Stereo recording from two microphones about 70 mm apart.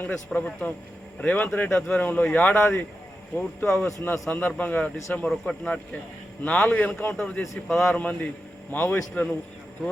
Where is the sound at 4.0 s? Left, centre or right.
Left.